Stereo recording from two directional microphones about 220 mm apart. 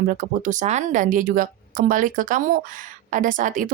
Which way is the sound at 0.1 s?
35° right (ahead or behind).